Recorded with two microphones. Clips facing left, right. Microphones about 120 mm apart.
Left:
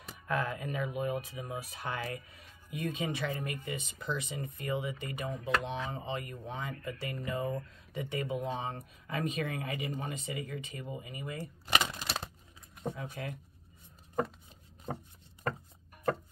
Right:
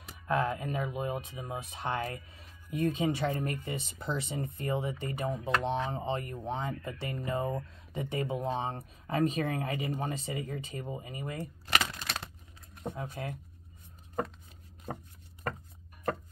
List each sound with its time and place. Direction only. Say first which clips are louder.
0.3 s speech: right 4 dB; 25° right (ahead or behind)
11.7 s crushing: left 1 dB; 15° left (ahead or behind)
12.9 s speech: right 2 dB; 30° right (ahead or behind)